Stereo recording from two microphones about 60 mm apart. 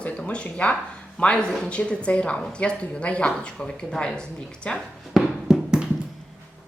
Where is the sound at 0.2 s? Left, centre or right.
Centre.